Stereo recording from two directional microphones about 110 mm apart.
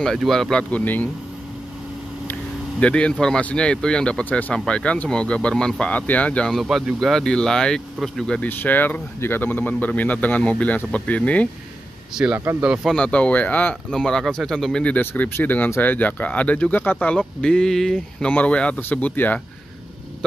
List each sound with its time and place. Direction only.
0.0 s speech: centre (ahead or behind)
2.8 s speech: 10° left (ahead or behind)
6.5 s speech: centre (ahead or behind)
8.4 s speech: 15° left (ahead or behind)
12.4 s speech: 25° right (ahead or behind)
12.8 s speech: 10° left (ahead or behind)